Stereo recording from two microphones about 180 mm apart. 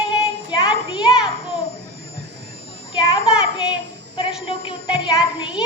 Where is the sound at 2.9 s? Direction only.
25° left (ahead or behind).